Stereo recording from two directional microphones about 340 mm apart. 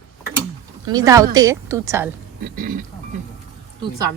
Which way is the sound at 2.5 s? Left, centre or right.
Right.